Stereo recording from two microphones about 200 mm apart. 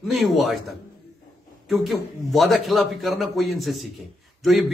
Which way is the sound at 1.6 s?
Centre (ahead or behind).